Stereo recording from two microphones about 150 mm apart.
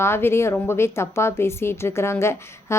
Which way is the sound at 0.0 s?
15° left (ahead or behind).